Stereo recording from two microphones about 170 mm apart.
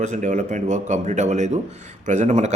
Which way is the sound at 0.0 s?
45° right (ahead or behind).